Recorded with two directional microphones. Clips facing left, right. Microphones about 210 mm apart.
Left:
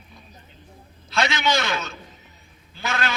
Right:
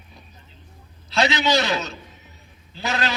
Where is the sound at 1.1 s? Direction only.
35° right (ahead or behind).